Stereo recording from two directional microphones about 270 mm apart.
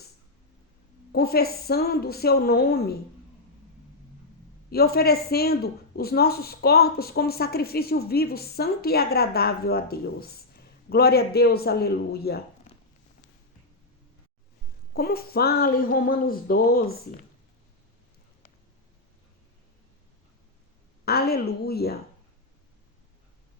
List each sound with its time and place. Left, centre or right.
1.1 s speech: left
4.7 s speech: left
12.7 s a sound: left
14.9 s speech: left
21.0 s speech: left